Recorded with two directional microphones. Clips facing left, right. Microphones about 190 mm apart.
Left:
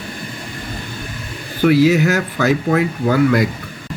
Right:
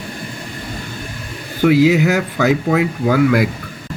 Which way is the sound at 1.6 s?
15° right (ahead or behind).